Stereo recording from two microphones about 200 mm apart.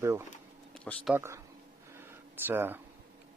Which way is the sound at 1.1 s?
15° right (ahead or behind).